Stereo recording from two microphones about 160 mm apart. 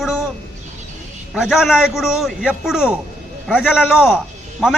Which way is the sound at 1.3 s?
5° right (ahead or behind).